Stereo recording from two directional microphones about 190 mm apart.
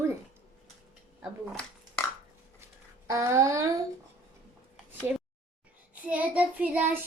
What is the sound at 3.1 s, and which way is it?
Speech, 15° right (ahead or behind).